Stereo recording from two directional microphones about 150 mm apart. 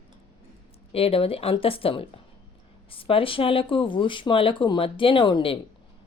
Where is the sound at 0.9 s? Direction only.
40° left (ahead or behind).